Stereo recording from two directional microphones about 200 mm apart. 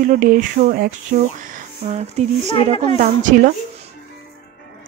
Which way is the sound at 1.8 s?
35° right (ahead or behind).